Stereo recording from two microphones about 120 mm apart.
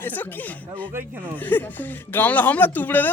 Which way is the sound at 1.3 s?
15° left (ahead or behind).